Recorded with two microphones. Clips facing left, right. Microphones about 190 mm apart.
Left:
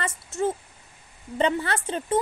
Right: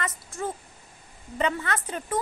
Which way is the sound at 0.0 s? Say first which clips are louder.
Left 5 dB; 25° left (ahead or behind).